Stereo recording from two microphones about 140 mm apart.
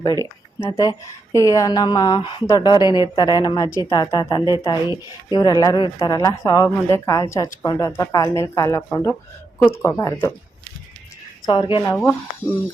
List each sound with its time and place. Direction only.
0.0 s speech: 25° left (ahead or behind)
11.4 s speech: 35° left (ahead or behind)